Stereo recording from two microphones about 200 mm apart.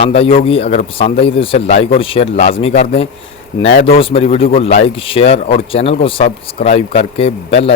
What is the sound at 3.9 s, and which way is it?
Speech, 30° left (ahead or behind).